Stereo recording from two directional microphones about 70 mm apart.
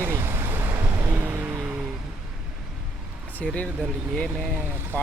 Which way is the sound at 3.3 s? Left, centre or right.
Centre.